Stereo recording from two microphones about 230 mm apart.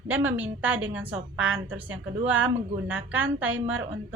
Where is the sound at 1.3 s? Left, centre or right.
Right.